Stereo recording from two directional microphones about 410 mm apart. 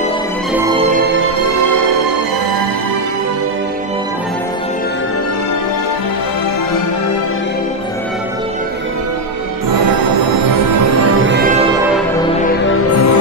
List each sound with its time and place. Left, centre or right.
9.7 s music: right
10.7 s music: right
12.9 s music: left